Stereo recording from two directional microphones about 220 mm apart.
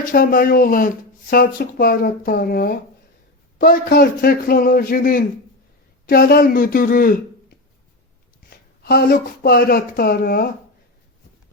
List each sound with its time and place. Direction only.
0.1 s a man's voice: 40° left (ahead or behind)
8.4 s speech: 45° left (ahead or behind)